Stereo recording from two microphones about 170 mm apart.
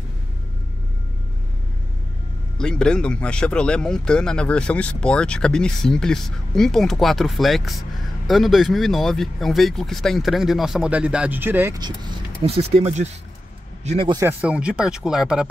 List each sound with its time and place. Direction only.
2.5 s speech: 5° left (ahead or behind); by 11.8 s 15° right (ahead or behind)
11.8 s speech: 30° right (ahead or behind)
14.1 s speech: 10° right (ahead or behind)